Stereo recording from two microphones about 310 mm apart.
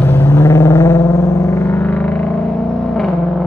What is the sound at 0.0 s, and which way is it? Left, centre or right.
Vehicle, centre.